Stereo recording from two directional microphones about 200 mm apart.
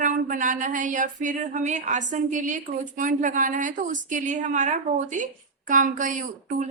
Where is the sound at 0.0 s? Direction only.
40° right (ahead or behind).